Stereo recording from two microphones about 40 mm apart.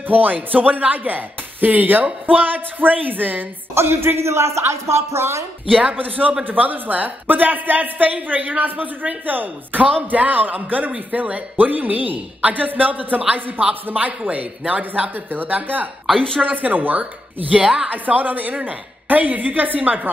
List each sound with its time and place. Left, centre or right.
0.1 s a woman's voice: right
3.7 s a man's voice: right
5.7 s speech: right
5.9 s a woman's voice: right
15.3 s a woman's voice: right